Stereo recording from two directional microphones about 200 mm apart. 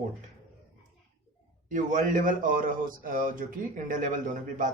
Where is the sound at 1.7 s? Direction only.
40° right (ahead or behind).